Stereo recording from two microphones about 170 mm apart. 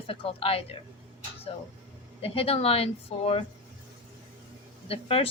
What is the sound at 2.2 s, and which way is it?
A woman's voice, 35° left (ahead or behind).